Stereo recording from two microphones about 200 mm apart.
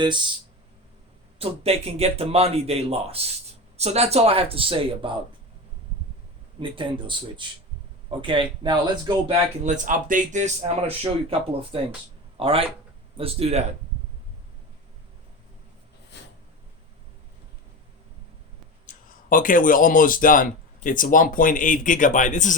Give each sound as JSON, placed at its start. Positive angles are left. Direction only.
{"t": 1.4, "sound": "speech", "side_deg": -30}
{"t": 6.6, "sound": "speech", "side_deg": -25}
{"t": 18.9, "sound": "speech", "side_deg": 40}